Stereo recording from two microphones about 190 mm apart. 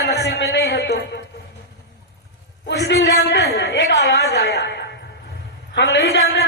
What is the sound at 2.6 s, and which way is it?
A man's voice, 65° left (ahead or behind).